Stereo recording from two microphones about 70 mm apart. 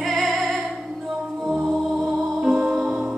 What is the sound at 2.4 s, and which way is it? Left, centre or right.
Music, centre.